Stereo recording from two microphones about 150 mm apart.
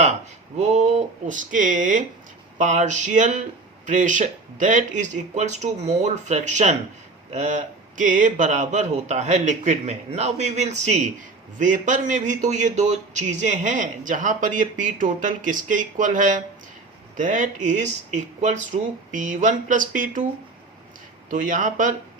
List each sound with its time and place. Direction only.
0.6 s a man's voice: 50° right (ahead or behind)
21.2 s a man's voice: 60° right (ahead or behind)